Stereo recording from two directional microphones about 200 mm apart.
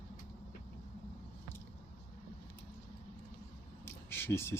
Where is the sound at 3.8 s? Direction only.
10° left (ahead or behind).